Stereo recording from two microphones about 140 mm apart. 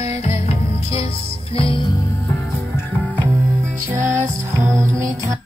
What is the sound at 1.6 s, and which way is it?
Music, 35° left (ahead or behind).